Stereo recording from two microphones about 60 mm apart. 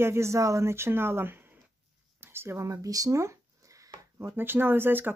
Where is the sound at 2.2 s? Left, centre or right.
Right.